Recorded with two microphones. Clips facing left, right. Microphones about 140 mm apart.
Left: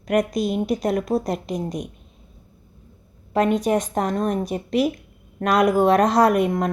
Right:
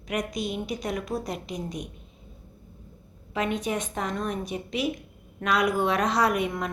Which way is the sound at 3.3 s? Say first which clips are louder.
Left 9 dB; 40° left (ahead or behind).